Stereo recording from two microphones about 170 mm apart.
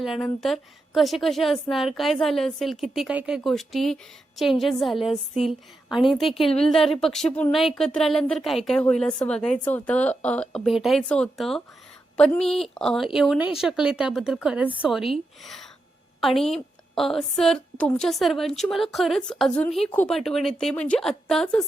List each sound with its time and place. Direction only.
0.0 s speech: centre (ahead or behind)
6.4 s a woman's voice: 35° left (ahead or behind)
6.7 s speech: centre (ahead or behind)
16.2 s speech: centre (ahead or behind)